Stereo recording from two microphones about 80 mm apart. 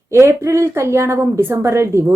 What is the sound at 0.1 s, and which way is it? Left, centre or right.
A woman's voice, right.